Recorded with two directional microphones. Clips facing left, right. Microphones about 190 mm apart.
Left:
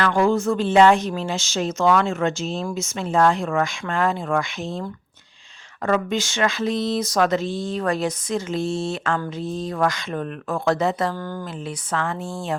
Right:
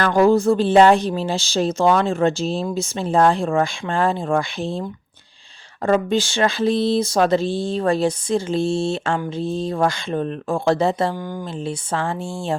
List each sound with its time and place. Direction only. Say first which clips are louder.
0.0 s speech: right 4 dB; 40° right (ahead or behind)
5.8 s speech: right 4 dB; 30° right (ahead or behind)
11.1 s speech: right 2 dB; 15° right (ahead or behind)
11.6 s speech: right 3 dB; 30° right (ahead or behind)